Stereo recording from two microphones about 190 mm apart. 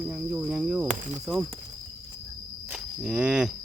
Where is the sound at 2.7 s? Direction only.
5° right (ahead or behind).